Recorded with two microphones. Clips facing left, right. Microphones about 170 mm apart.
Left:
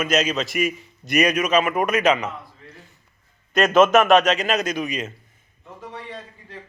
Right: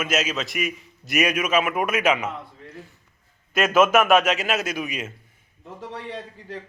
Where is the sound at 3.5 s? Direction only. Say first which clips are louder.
Left 3 dB; 5° right (ahead or behind).